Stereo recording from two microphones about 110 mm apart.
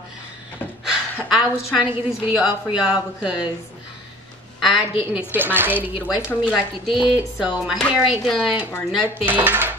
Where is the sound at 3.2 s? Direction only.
10° right (ahead or behind).